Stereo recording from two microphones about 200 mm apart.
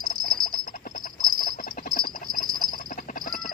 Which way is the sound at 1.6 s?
45° left (ahead or behind).